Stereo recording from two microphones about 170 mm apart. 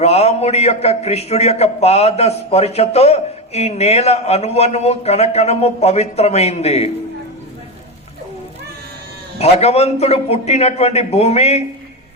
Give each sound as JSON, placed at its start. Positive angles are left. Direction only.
{"t": 0.0, "sound": "a man's voice", "side_deg": 40}
{"t": 9.4, "sound": "a man's voice", "side_deg": 40}